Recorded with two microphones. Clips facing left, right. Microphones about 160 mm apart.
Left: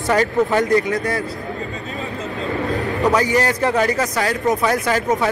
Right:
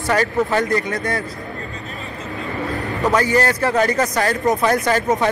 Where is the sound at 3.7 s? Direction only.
5° left (ahead or behind).